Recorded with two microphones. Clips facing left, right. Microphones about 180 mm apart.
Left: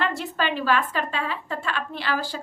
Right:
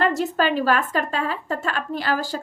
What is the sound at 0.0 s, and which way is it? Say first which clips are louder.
A woman's voice: right 6 dB; 40° right (ahead or behind).